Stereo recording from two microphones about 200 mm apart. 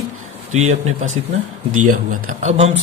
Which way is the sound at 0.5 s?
35° right (ahead or behind).